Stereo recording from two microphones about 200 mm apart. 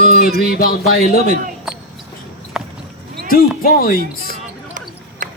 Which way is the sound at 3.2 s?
45° left (ahead or behind).